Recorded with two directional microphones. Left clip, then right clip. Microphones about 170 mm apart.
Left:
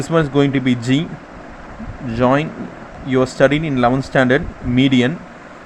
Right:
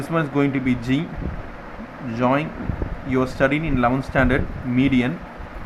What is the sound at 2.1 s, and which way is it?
Speech, 30° left (ahead or behind).